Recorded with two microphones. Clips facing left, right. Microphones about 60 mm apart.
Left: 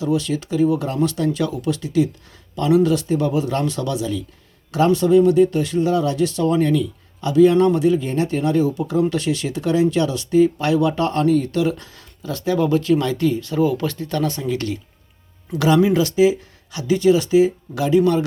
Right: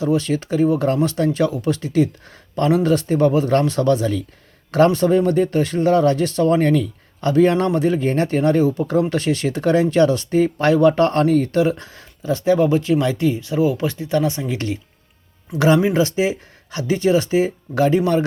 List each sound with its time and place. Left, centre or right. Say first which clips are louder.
0.0 s speech: right 2 dB; right